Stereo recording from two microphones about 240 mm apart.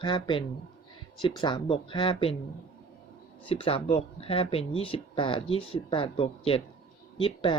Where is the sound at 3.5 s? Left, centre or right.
Left.